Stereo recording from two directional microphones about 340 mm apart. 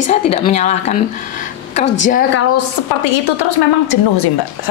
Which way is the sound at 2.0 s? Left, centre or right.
Left.